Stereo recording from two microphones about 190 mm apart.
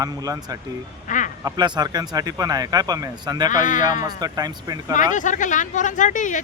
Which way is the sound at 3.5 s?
45° left (ahead or behind).